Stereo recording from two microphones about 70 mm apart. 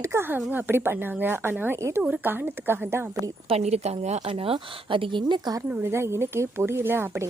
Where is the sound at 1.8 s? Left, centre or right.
Right.